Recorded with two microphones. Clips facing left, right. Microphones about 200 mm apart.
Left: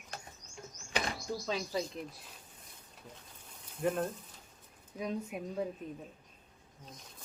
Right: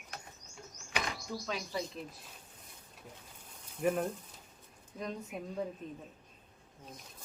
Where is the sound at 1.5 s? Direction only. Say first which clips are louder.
Left 3 dB; 20° left (ahead or behind).